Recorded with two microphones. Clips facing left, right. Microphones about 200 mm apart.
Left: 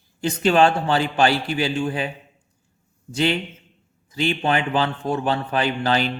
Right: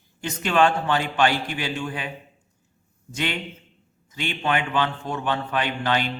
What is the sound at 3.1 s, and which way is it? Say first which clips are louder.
A man's voice: left 7 dB; 35° left (ahead or behind).